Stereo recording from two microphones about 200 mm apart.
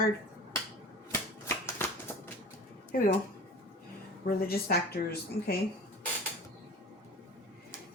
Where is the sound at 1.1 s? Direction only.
10° left (ahead or behind).